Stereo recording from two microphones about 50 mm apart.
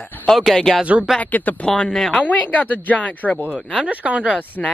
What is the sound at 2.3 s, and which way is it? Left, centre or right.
Speech, left.